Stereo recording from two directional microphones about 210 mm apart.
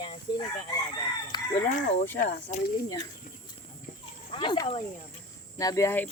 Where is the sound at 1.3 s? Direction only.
20° left (ahead or behind).